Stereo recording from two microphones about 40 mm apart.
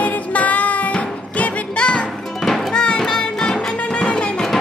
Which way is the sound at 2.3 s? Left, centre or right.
Centre.